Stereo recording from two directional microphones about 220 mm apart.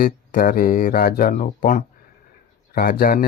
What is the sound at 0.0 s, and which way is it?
Speech, 40° left (ahead or behind).